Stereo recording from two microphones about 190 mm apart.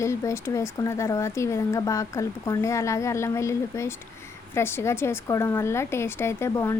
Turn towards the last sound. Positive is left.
turn(degrees=15)  # may be behind; listen again after turning